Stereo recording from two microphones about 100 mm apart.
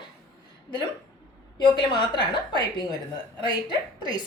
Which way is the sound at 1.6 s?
50° left (ahead or behind).